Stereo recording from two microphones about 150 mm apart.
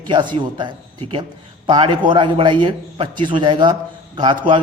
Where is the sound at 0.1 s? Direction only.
30° right (ahead or behind).